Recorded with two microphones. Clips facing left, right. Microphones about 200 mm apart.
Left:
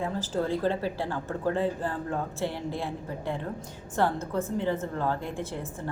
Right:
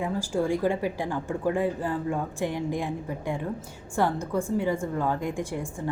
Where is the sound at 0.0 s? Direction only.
10° right (ahead or behind).